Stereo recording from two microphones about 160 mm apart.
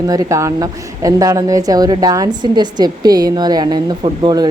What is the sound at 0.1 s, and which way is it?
A woman's voice, 20° right (ahead or behind).